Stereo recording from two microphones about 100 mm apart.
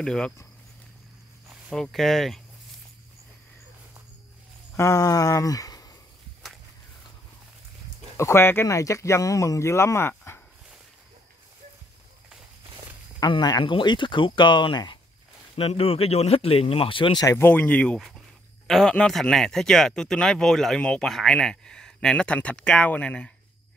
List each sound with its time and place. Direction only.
0.0 s speech: 5° left (ahead or behind)
1.7 s speech: centre (ahead or behind)
4.7 s speech: 30° left (ahead or behind)
8.2 s speech: 25° left (ahead or behind)
13.3 s speech: 45° left (ahead or behind)
15.5 s speech: 75° left (ahead or behind); by 17.2 s 60° left (ahead or behind)
17.4 s speech: 20° left (ahead or behind)
17.9 s speech: centre (ahead or behind)